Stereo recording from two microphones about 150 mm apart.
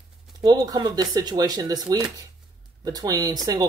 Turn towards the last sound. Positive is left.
turn(degrees=-25)  # may be behind; listen again after turning